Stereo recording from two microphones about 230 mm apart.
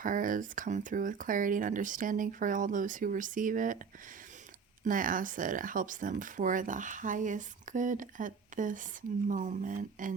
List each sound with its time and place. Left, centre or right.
0.0 s speech: right
4.9 s speech: right